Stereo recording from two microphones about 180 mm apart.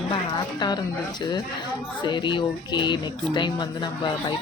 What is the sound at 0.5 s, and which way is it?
Speech, 25° left (ahead or behind).